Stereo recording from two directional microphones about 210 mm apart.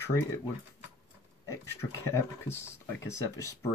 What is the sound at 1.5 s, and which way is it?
Speech, 15° left (ahead or behind).